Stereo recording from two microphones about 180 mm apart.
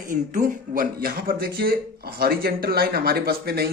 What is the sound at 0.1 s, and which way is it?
Speech, 45° right (ahead or behind).